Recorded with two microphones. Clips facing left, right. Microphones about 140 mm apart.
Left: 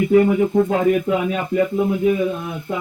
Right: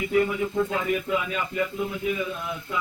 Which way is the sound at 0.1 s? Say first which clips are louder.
Left 8 dB; 50° left (ahead or behind).